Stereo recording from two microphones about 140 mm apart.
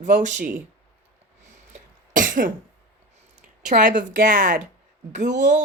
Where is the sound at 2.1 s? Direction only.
75° right (ahead or behind).